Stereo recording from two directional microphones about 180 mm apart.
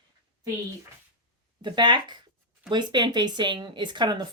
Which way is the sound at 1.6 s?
25° right (ahead or behind).